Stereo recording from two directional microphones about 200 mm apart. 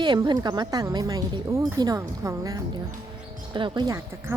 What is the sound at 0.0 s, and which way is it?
Speech, 20° right (ahead or behind).